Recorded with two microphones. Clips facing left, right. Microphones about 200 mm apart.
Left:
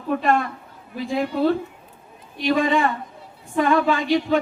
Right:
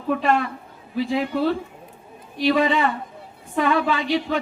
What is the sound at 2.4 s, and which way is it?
A man's voice, 45° left (ahead or behind).